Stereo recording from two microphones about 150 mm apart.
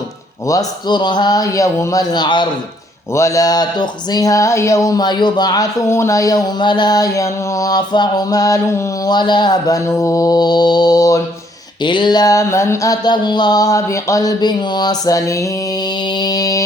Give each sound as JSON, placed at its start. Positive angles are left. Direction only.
{"t": 0.4, "sound": "speech", "side_deg": 25}
{"t": 3.1, "sound": "speech", "side_deg": 20}
{"t": 16.0, "sound": "mantra", "side_deg": 30}